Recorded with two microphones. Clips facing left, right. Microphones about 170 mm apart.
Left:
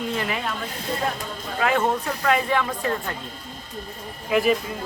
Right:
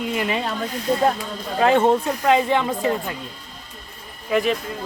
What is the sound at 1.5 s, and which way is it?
Speech, 30° right (ahead or behind).